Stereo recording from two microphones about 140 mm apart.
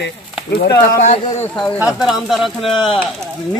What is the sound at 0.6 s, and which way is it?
Speech, 90° left.